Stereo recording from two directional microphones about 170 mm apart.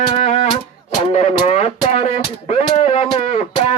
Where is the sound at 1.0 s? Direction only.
40° left (ahead or behind).